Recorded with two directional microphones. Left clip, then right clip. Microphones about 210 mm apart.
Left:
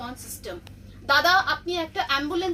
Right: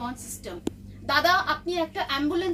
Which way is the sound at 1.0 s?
20° right (ahead or behind).